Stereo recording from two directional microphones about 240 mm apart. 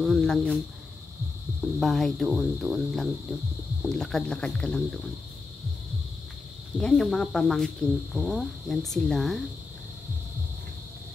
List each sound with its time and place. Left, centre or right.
0.0 s speech: centre
1.8 s speech: centre
6.8 s speech: centre